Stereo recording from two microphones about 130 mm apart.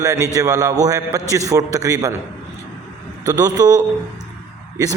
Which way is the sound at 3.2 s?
30° right (ahead or behind).